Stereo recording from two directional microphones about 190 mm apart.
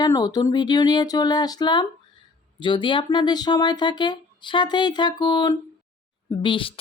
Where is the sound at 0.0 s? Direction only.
20° left (ahead or behind).